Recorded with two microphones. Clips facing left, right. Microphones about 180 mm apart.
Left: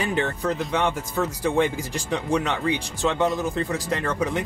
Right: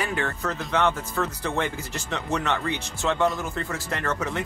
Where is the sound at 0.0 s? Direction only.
20° left (ahead or behind).